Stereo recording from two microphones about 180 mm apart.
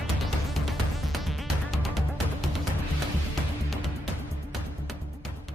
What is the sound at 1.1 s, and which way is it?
Music, centre (ahead or behind).